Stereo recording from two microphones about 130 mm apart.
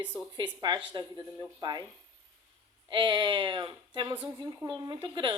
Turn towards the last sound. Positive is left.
turn(degrees=-40)  # may be behind; listen again after turning